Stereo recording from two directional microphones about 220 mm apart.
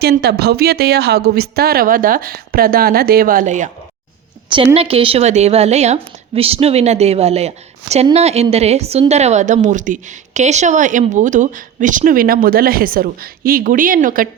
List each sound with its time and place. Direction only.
0.0 s a woman's voice: 45° right (ahead or behind)